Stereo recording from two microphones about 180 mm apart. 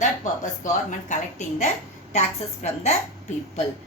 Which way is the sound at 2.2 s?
40° left (ahead or behind).